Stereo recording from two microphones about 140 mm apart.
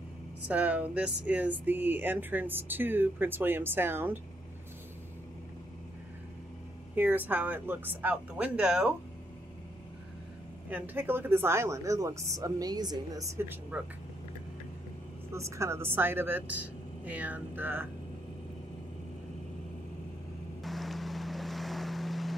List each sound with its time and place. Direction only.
0.5 s speech: 10° right (ahead or behind)
7.0 s speech: 15° right (ahead or behind)
10.7 s speech: 15° right (ahead or behind)
15.3 s speech: 20° right (ahead or behind)
20.6 s boat: centre (ahead or behind)